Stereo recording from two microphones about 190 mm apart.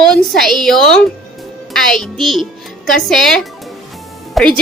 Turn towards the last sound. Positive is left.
turn(degrees=5)  # may be behind; listen again after turning